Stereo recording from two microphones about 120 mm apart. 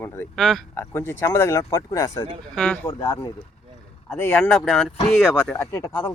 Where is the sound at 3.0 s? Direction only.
20° left (ahead or behind).